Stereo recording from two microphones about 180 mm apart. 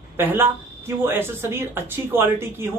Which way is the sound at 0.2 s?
10° right (ahead or behind).